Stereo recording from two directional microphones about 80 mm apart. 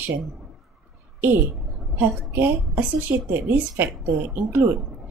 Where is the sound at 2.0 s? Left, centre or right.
Right.